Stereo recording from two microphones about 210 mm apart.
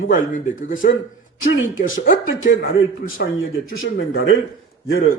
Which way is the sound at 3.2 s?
45° left (ahead or behind).